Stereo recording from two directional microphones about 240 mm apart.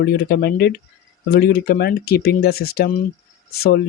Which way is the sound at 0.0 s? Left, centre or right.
Left.